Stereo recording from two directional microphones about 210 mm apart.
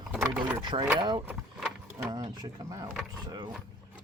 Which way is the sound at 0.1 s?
5° right (ahead or behind).